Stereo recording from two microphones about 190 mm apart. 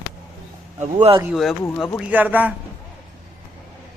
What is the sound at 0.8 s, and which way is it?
Speech, 35° right (ahead or behind).